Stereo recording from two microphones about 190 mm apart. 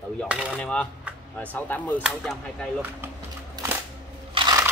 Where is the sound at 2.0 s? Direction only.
5° right (ahead or behind).